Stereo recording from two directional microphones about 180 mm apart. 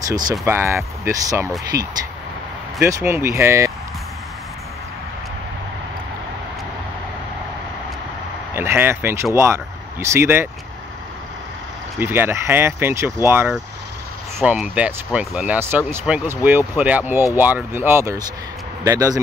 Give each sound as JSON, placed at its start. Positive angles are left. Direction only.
{"t": 0.1, "sound": "speech", "side_deg": -20}
{"t": 2.8, "sound": "speech", "side_deg": -15}
{"t": 8.5, "sound": "speech", "side_deg": -10}
{"t": 12.0, "sound": "speech", "side_deg": -10}